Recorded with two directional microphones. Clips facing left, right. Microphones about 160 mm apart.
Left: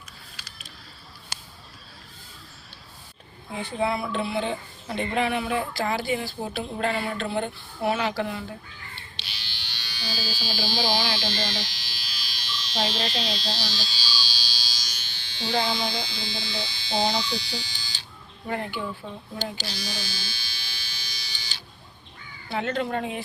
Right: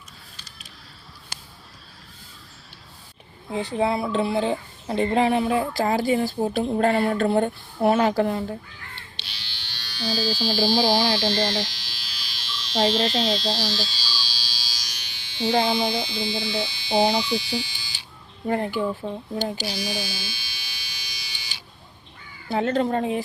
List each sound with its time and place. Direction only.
3.5 s speech: 30° right (ahead or behind)
9.2 s electric shaver: 5° left (ahead or behind)
10.2 s speech: 5° left (ahead or behind)
10.6 s speech: 30° right (ahead or behind)
11.7 s electric shaver: 5° left (ahead or behind)
12.7 s speech: 30° right (ahead or behind)
13.3 s electric shaver: centre (ahead or behind)
15.4 s speech: 20° right (ahead or behind)
18.4 s speech: 35° right (ahead or behind)
19.6 s electric shaver: 15° right (ahead or behind)
22.4 s speech: 35° right (ahead or behind)